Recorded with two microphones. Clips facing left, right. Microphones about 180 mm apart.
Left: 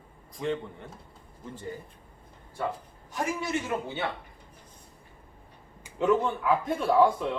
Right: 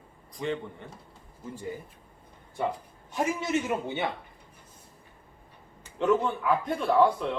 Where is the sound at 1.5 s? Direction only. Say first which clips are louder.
Right 2 dB; 15° right (ahead or behind).